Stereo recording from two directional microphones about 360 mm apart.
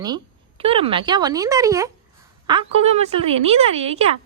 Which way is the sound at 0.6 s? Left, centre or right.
Centre.